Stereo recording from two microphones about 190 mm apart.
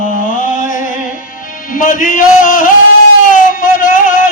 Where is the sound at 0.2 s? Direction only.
40° left (ahead or behind).